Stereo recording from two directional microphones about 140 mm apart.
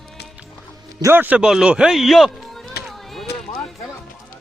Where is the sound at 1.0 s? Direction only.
15° right (ahead or behind); by 3.3 s centre (ahead or behind).